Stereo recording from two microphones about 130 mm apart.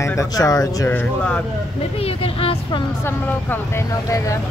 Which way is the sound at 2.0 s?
50° left (ahead or behind).